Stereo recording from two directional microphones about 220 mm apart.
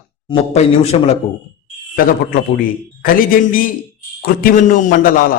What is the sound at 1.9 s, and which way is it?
A man's voice, 40° left (ahead or behind).